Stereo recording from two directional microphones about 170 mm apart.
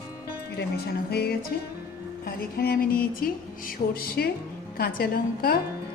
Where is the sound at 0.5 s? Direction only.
70° left (ahead or behind).